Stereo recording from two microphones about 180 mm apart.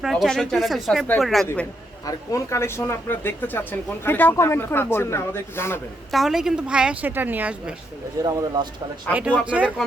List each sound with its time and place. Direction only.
0.0 s a woman's voice: centre (ahead or behind)
2.0 s speech: 15° left (ahead or behind)
6.1 s a woman's voice: centre (ahead or behind)
8.2 s speech: 20° right (ahead or behind)
9.4 s speech: 5° right (ahead or behind)